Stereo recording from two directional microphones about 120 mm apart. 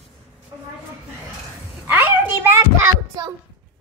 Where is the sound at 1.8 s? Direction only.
15° right (ahead or behind).